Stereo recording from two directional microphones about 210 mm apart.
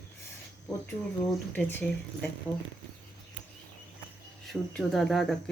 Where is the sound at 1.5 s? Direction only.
10° left (ahead or behind).